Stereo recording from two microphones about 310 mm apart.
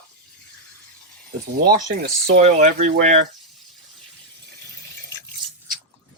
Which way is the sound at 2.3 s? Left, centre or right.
Right.